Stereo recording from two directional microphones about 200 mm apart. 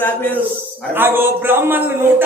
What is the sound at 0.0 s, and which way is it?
Speech, 10° left (ahead or behind).